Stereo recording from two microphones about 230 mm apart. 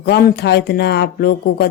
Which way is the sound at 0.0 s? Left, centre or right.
Left.